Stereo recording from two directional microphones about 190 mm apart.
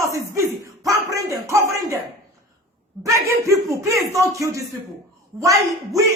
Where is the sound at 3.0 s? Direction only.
15° right (ahead or behind).